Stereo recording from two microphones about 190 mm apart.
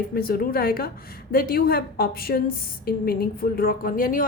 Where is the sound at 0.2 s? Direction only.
50° left (ahead or behind).